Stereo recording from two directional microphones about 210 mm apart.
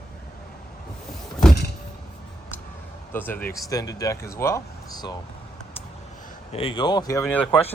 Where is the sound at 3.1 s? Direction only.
10° left (ahead or behind).